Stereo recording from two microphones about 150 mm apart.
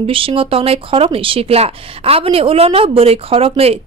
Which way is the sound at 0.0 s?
35° right (ahead or behind).